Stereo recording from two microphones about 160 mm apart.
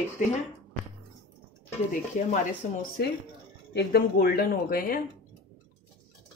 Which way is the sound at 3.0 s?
70° left (ahead or behind).